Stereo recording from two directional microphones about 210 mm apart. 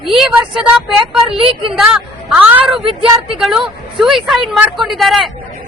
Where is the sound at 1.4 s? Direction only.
25° right (ahead or behind).